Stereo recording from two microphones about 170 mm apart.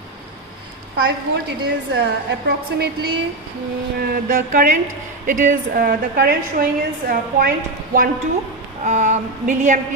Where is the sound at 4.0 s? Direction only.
60° right (ahead or behind).